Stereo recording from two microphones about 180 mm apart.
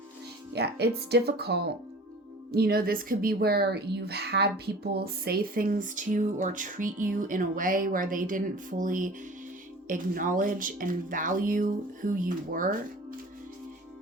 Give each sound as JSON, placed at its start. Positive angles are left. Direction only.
{"t": 0.5, "sound": "speech", "side_deg": -65}